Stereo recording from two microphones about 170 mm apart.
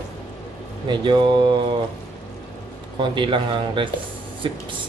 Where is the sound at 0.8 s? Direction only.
30° right (ahead or behind).